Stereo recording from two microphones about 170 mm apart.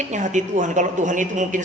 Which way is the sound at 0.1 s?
45° right (ahead or behind).